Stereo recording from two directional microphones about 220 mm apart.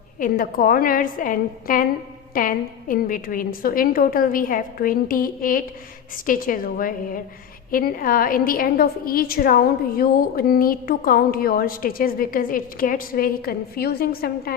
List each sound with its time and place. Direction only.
0.2 s a woman's voice: 40° left (ahead or behind)